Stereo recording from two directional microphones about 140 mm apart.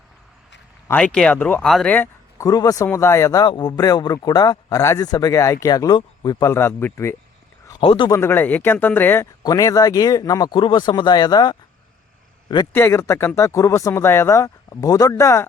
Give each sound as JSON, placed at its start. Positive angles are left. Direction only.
{"t": 0.9, "sound": "speech", "side_deg": 10}
{"t": 2.4, "sound": "speech", "side_deg": 25}
{"t": 3.4, "sound": "speech", "side_deg": 30}
{"t": 6.5, "sound": "speech", "side_deg": 15}
{"t": 7.8, "sound": "speech", "side_deg": 35}
{"t": 8.1, "sound": "speech", "side_deg": 15}
{"t": 9.4, "sound": "speech", "side_deg": 25}
{"t": 12.7, "sound": "speech", "side_deg": 15}